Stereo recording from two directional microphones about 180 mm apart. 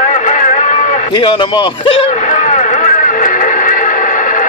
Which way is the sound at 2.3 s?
45° left (ahead or behind).